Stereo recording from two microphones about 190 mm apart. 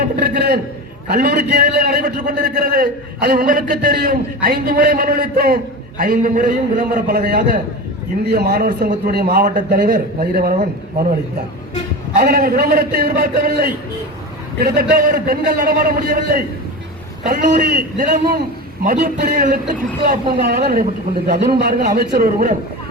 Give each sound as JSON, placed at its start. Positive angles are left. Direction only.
{"t": 0.2, "sound": "a man's voice", "side_deg": -60}
{"t": 12.1, "sound": "a man's voice", "side_deg": -50}
{"t": 17.9, "sound": "a man's voice", "side_deg": -45}